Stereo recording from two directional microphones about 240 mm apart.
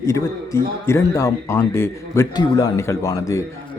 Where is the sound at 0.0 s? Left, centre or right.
Centre.